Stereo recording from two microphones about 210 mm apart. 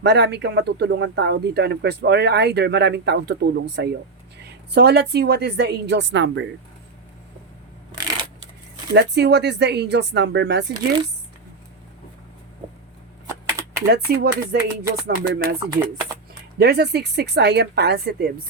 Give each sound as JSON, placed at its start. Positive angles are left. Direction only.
{"t": 0.0, "sound": "speech", "side_deg": -55}
{"t": 8.9, "sound": "speech", "side_deg": -50}
{"t": 13.2, "sound": "computer keyboard", "side_deg": -15}
{"t": 13.8, "sound": "speech", "side_deg": -50}
{"t": 16.6, "sound": "speech", "side_deg": -50}